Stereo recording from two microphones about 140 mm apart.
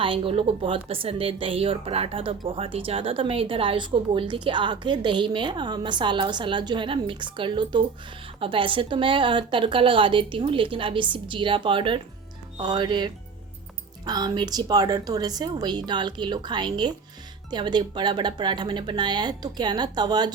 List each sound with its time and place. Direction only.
0.0 s a woman's voice: 40° right (ahead or behind)